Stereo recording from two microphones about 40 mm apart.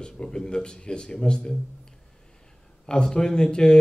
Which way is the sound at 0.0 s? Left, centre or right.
Left.